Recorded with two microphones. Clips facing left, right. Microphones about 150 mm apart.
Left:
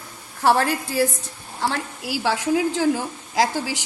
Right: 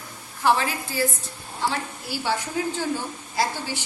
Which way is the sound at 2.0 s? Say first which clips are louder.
Left 6 dB; 90° left.